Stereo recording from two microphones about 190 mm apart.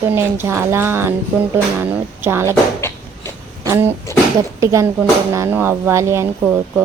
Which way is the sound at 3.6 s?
15° right (ahead or behind).